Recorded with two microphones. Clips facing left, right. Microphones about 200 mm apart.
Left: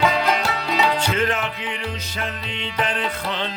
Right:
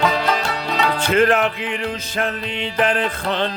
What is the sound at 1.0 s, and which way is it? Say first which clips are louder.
Music: right 7 dB; 55° right (ahead or behind).